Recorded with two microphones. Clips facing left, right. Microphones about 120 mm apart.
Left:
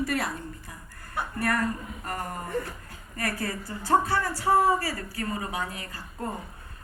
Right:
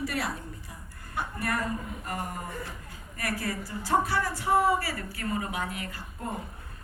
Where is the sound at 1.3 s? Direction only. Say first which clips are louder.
Left 4 dB; 55° left (ahead or behind).